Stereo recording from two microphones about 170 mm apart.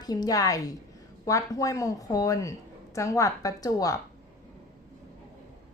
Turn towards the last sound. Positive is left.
turn(degrees=20)  # may be behind; listen again after turning